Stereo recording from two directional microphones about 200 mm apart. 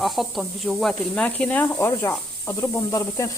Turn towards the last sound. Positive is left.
turn(degrees=15)  # may be behind; listen again after turning